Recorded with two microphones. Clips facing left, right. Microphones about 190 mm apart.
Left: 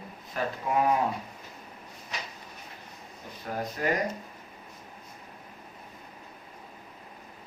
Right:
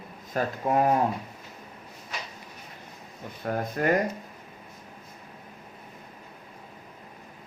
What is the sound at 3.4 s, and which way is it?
Speech, 55° right (ahead or behind).